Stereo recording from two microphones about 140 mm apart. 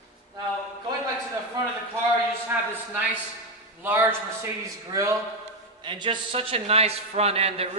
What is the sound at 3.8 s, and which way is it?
A man's voice, 15° right (ahead or behind).